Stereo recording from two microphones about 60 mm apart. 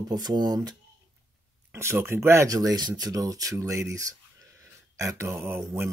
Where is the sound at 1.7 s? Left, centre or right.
Right.